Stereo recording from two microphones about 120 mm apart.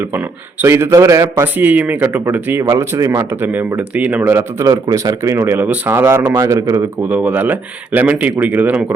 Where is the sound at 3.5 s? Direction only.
10° right (ahead or behind); by 6.8 s 30° right (ahead or behind).